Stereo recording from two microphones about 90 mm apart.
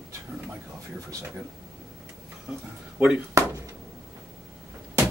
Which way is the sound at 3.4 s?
35° right (ahead or behind).